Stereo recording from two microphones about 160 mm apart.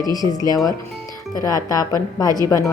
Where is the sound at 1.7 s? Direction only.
20° left (ahead or behind).